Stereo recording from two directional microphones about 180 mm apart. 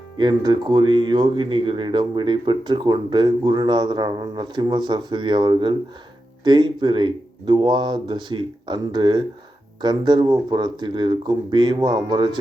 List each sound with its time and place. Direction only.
0.2 s speech: 25° right (ahead or behind)